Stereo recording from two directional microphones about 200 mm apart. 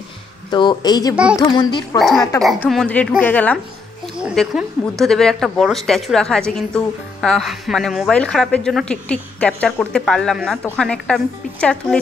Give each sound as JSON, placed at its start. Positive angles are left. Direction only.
{"t": 0.5, "sound": "speech", "side_deg": 20}
{"t": 1.1, "sound": "a woman's voice", "side_deg": -5}
{"t": 1.5, "sound": "speech", "side_deg": 25}
{"t": 2.0, "sound": "a woman's voice", "side_deg": 0}
{"t": 4.2, "sound": "a woman's voice", "side_deg": -5}